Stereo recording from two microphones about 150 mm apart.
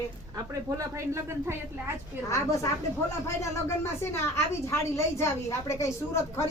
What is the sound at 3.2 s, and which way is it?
A woman's voice, 20° left (ahead or behind).